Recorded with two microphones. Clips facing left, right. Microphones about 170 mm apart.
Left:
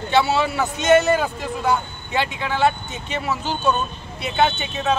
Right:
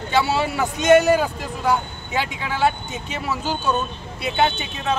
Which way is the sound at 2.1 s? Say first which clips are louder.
Left 2 dB; 10° right (ahead or behind).